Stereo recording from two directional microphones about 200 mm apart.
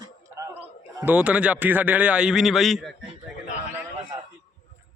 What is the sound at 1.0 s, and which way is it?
A man's voice, 5° right (ahead or behind).